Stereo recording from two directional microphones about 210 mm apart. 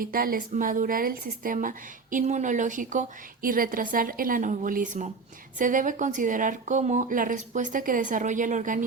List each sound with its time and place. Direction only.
0.0 s a woman's voice: 45° right (ahead or behind)